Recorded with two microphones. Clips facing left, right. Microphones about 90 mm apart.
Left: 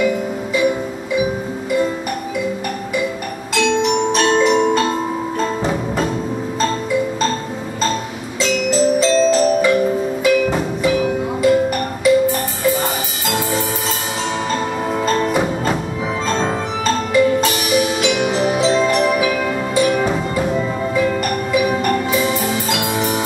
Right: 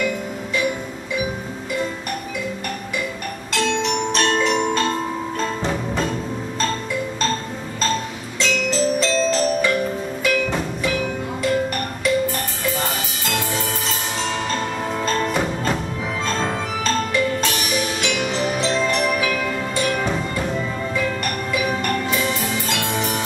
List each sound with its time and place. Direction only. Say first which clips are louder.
0.0 s music: left 6 dB; 5° left (ahead or behind)
3.5 s marimba: left 5 dB; centre (ahead or behind)
5.4 s music: left 4 dB; 5° left (ahead or behind)
7.8 s music: left 2 dB; 5° left (ahead or behind)
16.8 s music: left 6 dB; 5° left (ahead or behind)